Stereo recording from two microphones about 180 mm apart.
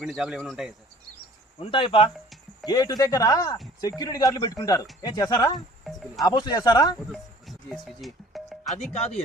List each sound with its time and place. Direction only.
0.0 s speech: 5° right (ahead or behind)
1.5 s speech: 30° left (ahead or behind)
5.8 s cricket: centre (ahead or behind)
6.2 s speech: 20° left (ahead or behind)
7.1 s music: centre (ahead or behind)
8.9 s speech: 35° left (ahead or behind)